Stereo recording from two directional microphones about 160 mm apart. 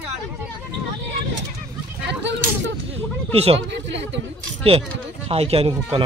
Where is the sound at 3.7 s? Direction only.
90° right.